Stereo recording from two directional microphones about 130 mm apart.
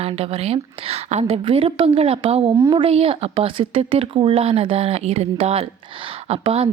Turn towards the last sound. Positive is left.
turn(degrees=-50)  # may be behind; listen again after turning